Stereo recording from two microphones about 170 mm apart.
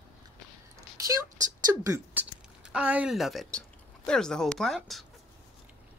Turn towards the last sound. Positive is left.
turn(degrees=0)  # may be behind; listen again after turning